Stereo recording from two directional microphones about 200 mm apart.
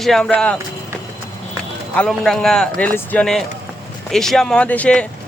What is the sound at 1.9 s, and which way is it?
Speech, 5° left (ahead or behind).